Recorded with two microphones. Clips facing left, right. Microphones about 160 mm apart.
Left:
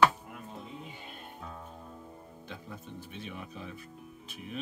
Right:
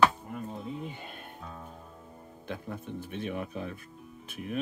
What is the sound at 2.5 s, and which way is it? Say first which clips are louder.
Speech: right 7 dB; 60° right (ahead or behind).